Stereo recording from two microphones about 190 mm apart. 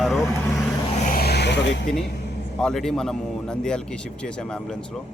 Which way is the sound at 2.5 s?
Centre (ahead or behind).